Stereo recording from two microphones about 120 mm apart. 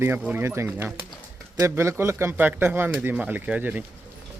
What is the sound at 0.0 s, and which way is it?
A man's voice, 20° right (ahead or behind).